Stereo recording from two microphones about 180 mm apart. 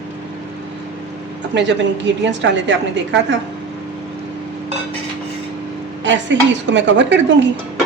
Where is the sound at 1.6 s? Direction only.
85° right.